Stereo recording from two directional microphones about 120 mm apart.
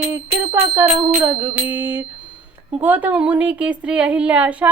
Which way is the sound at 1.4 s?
15° right (ahead or behind).